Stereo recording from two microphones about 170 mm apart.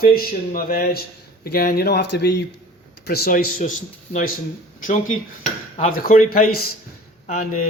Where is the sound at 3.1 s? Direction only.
60° left (ahead or behind).